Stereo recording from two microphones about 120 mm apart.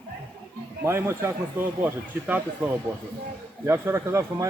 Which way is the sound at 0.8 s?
20° right (ahead or behind).